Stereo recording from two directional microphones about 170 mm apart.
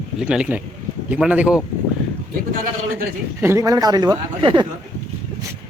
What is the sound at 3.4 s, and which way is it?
Speech, 20° right (ahead or behind).